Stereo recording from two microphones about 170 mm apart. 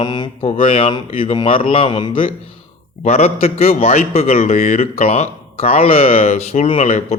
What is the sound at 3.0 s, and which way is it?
A man's voice, 40° left (ahead or behind).